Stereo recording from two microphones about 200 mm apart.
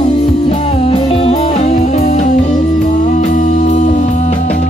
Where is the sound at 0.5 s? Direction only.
35° left (ahead or behind).